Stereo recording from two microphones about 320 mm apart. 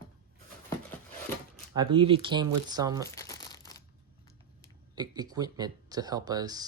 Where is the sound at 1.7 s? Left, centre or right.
Centre.